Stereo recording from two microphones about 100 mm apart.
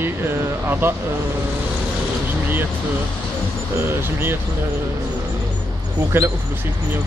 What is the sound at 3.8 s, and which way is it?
Speech, 20° right (ahead or behind).